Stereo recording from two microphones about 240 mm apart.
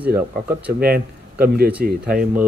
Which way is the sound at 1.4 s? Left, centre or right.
Right.